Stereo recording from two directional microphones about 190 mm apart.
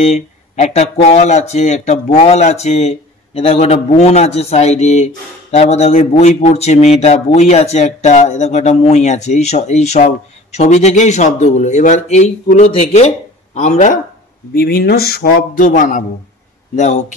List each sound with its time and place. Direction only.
0.0 s speech: 35° left (ahead or behind)
14.5 s speech: 55° left (ahead or behind); by 17.0 s 40° left (ahead or behind)